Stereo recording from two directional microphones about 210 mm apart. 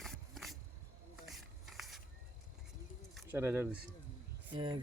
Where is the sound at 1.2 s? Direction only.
Centre (ahead or behind).